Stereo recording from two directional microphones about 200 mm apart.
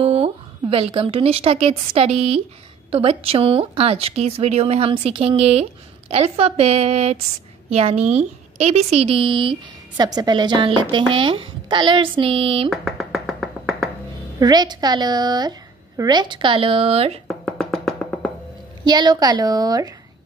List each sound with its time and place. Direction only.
0.0 s a woman's voice: 30° right (ahead or behind)
12.6 s finger snapping: centre (ahead or behind)
14.4 s a woman's voice: 20° right (ahead or behind)
17.5 s music: 5° left (ahead or behind)
18.9 s a woman's voice: 20° right (ahead or behind)